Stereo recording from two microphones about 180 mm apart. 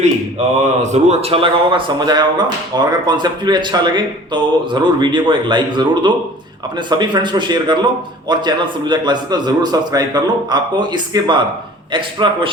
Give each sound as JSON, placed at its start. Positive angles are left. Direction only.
{"t": 0.6, "sound": "speech", "side_deg": -40}